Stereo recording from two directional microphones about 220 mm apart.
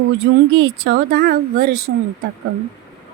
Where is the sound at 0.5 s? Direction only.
55° right (ahead or behind).